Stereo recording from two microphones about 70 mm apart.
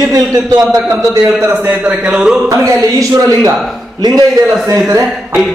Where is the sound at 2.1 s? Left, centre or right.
Centre.